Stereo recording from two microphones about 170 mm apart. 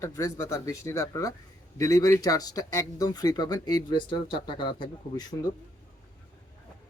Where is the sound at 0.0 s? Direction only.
20° left (ahead or behind).